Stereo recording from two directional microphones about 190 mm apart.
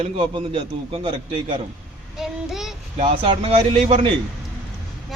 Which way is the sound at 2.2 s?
Centre (ahead or behind).